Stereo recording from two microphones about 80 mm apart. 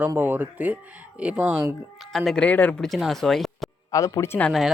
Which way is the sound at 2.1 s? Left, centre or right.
Centre.